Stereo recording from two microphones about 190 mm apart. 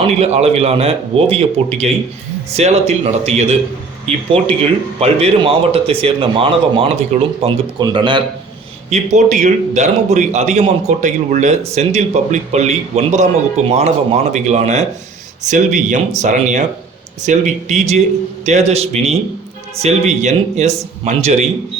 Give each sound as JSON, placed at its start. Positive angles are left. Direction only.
{"t": 0.0, "sound": "a man's voice", "side_deg": -35}
{"t": 8.9, "sound": "a man's voice", "side_deg": -35}